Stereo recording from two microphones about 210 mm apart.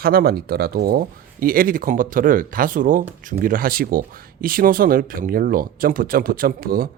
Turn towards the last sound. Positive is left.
turn(degrees=-45)  # may be behind; listen again after turning